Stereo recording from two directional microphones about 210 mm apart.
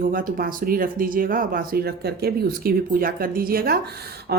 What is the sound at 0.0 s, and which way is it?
A woman's voice, 40° right (ahead or behind).